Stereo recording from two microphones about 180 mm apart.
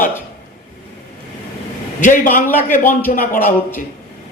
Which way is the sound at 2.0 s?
45° left (ahead or behind).